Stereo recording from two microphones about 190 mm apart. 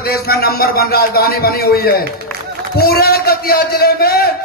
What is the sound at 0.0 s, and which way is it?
A man's voice, 55° left (ahead or behind).